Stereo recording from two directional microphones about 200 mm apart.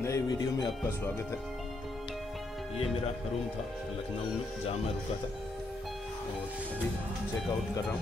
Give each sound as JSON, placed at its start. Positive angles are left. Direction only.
{"t": 0.0, "sound": "speech", "side_deg": 15}